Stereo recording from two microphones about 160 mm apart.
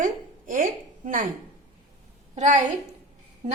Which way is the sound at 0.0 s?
55° right (ahead or behind).